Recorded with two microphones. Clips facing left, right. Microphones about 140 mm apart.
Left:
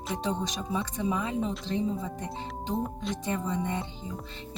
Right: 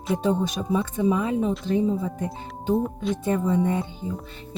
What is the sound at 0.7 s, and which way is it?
Speech, 55° right (ahead or behind).